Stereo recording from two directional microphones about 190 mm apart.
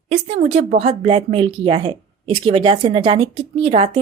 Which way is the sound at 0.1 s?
35° right (ahead or behind).